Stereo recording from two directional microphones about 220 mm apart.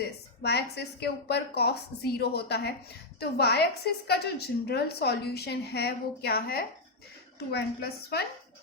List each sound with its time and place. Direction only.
0.4 s a woman's voice: 50° left (ahead or behind)